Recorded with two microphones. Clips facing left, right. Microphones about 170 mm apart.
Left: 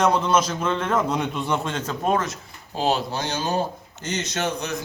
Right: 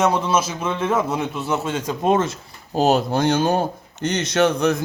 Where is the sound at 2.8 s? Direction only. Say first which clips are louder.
Right 6 dB; 45° right (ahead or behind).